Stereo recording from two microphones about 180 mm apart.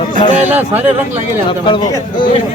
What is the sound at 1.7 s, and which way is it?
Speech, 25° left (ahead or behind).